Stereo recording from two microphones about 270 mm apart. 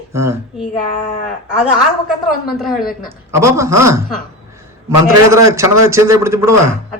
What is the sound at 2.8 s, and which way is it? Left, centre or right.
Speech, left.